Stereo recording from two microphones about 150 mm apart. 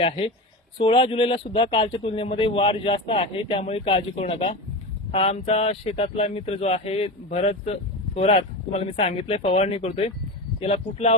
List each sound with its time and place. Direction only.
0.8 s speech: 40° left (ahead or behind)